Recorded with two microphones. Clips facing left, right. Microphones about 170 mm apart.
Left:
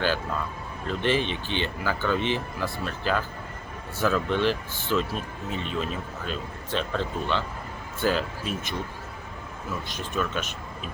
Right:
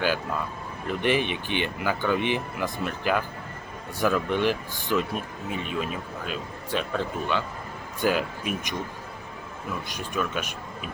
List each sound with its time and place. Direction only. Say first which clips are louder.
0.9 s speech: right 1 dB; 15° right (ahead or behind)
9.9 s speech: even; 10° right (ahead or behind)